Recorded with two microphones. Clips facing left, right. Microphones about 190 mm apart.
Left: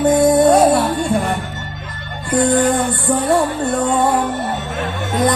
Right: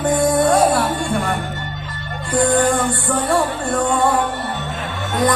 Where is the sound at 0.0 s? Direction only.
20° left (ahead or behind).